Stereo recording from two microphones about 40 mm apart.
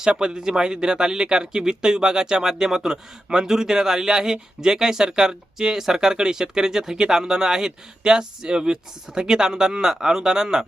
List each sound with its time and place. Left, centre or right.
0.1 s speech: centre
5.5 s speech: centre